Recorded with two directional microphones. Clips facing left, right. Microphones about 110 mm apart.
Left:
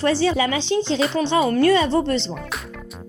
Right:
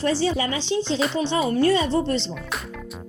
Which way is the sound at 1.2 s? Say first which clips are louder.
Left 4 dB; 70° left (ahead or behind).